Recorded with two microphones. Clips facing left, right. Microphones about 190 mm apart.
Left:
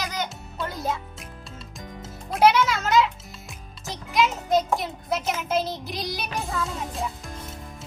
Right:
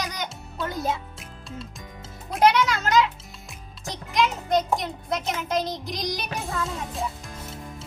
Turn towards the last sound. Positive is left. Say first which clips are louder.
# even
turn(degrees=0)  # may be behind; listen again after turning